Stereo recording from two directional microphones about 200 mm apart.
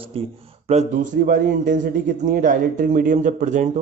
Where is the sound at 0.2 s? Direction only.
30° right (ahead or behind).